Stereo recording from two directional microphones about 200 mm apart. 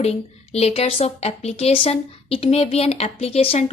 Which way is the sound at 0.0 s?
30° left (ahead or behind).